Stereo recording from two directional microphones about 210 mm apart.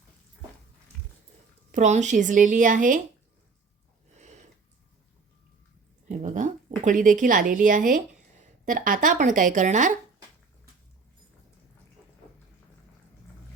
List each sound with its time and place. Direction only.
1.7 s speech: 35° right (ahead or behind)
6.1 s speech: 35° right (ahead or behind)